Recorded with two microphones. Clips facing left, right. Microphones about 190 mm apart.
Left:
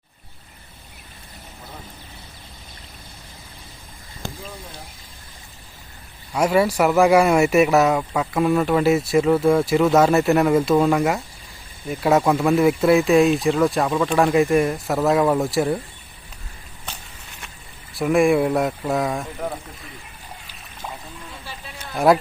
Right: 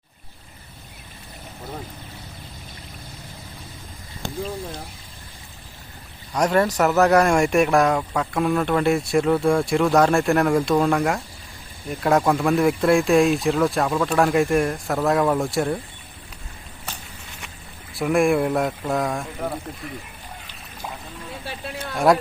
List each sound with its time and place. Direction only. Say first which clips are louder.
6.3 s speech: left 1 dB; 5° left (ahead or behind)
17.9 s speech: left 2 dB; centre (ahead or behind)
21.4 s a sound: right 6 dB; 65° right (ahead or behind)
21.9 s speech: left 1 dB; centre (ahead or behind)